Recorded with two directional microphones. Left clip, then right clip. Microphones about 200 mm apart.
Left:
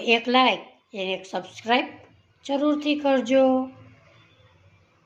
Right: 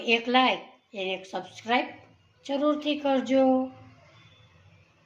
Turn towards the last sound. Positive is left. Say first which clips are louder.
# left 3 dB
turn(degrees=20)  # may be behind; listen again after turning